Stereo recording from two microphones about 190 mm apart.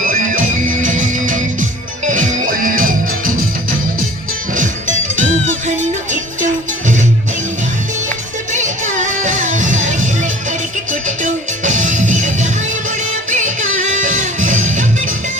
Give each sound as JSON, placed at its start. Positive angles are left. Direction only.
{"t": 0.0, "sound": "music", "side_deg": -45}
{"t": 8.5, "sound": "music", "side_deg": -40}